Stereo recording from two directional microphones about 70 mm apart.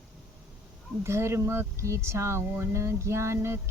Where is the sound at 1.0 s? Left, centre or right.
Right.